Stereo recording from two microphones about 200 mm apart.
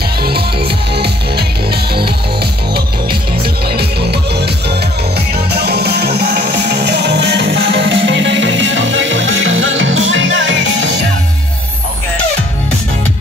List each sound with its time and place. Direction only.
0.9 s music: 55° right (ahead or behind)
5.7 s music: 55° right (ahead or behind)